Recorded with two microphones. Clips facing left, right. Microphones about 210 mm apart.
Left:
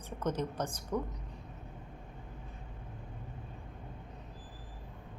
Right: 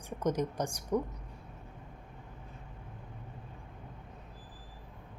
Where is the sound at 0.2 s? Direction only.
10° right (ahead or behind).